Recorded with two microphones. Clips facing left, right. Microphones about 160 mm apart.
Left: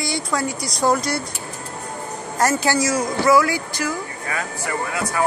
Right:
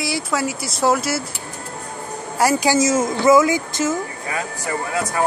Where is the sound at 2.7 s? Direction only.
20° right (ahead or behind).